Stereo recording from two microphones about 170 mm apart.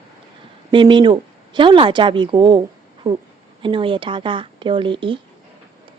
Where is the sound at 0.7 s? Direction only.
30° right (ahead or behind).